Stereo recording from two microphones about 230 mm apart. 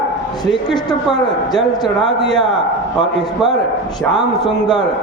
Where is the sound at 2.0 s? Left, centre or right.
Right.